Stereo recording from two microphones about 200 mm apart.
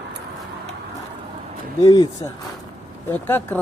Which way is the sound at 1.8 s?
15° left (ahead or behind).